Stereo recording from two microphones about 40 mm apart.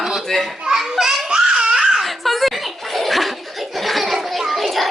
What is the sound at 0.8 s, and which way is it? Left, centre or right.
Baby laughter, centre.